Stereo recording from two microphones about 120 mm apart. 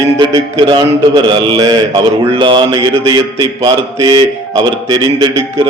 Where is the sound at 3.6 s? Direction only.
35° right (ahead or behind).